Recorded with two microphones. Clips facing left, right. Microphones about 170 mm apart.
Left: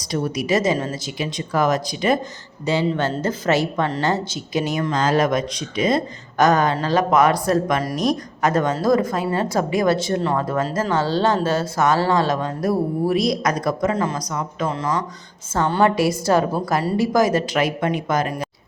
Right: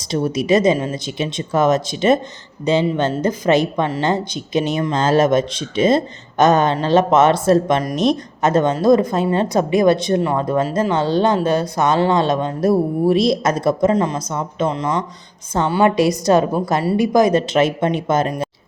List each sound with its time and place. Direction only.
0.1 s speech: 20° right (ahead or behind)